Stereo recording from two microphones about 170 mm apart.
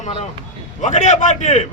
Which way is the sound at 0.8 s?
45° left (ahead or behind).